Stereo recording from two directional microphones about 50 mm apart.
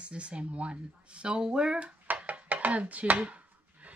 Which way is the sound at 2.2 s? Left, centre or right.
Right.